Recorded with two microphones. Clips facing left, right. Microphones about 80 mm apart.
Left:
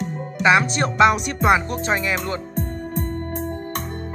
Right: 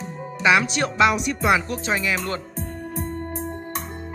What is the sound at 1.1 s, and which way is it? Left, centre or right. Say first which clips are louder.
Speech: left 2 dB; left.